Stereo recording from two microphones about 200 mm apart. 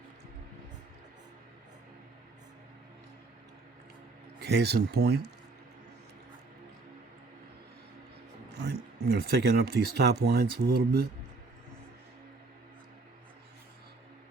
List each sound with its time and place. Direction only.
4.4 s speech: 55° right (ahead or behind)
8.6 s speech: 55° right (ahead or behind)